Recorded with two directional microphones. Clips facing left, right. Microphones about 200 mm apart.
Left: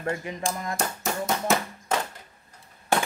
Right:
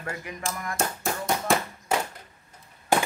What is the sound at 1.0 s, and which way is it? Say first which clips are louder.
Tap: left 1 dB; centre (ahead or behind).